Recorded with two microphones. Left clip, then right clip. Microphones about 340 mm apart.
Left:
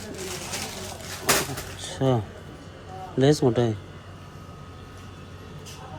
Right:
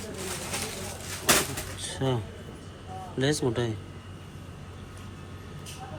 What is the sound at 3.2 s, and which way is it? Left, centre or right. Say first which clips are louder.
Speech: left 7 dB; centre.